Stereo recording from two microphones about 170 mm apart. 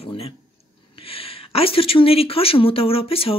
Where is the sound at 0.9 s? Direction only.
35° left (ahead or behind).